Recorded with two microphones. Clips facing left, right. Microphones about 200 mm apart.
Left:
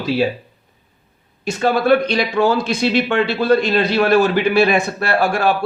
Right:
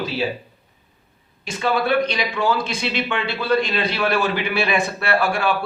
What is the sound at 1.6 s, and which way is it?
Speech, 45° left (ahead or behind).